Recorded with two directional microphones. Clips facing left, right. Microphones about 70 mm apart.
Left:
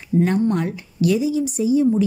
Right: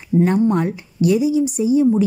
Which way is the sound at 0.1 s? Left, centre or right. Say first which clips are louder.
Right 3 dB; right.